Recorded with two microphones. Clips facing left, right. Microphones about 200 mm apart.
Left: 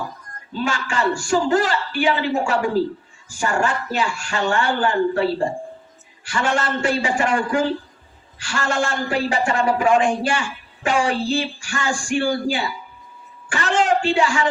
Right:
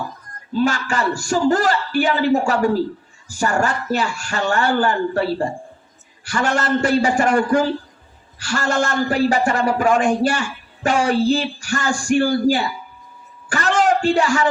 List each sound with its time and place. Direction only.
0.6 s speech: 40° right (ahead or behind)
6.2 s speech: 40° right (ahead or behind)
13.5 s a sound: 40° right (ahead or behind)